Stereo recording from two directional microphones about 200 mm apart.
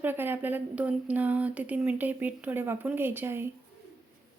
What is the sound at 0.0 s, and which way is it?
Speech, 10° right (ahead or behind).